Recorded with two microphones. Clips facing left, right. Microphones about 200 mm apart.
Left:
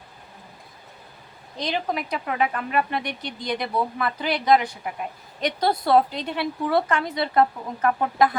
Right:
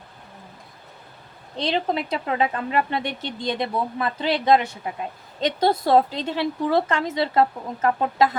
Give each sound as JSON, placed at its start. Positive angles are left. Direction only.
{"t": 1.5, "sound": "speech", "side_deg": -25}